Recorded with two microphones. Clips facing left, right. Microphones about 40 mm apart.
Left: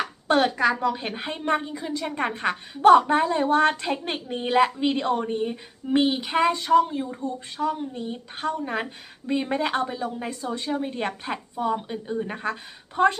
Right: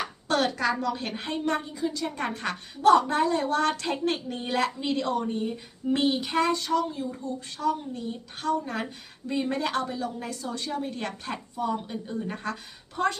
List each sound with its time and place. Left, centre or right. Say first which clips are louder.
0.3 s a woman's voice: left 5 dB; left